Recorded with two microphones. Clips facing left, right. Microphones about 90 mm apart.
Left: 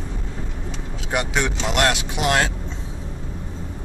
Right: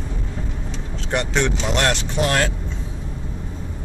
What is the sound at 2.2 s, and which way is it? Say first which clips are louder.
Speech: even; 20° left (ahead or behind).